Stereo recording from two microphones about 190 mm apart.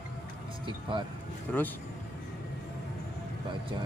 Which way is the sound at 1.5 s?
10° left (ahead or behind).